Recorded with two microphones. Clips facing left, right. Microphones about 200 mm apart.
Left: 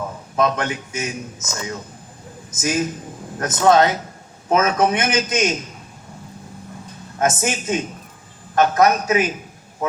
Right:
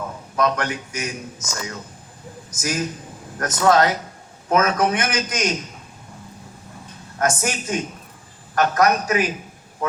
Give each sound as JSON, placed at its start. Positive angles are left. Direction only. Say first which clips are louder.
{"t": 0.3, "sound": "a man's voice", "louder": "left 1 dB", "side_deg": 25}
{"t": 7.2, "sound": "a man's voice", "louder": "left 2 dB", "side_deg": 25}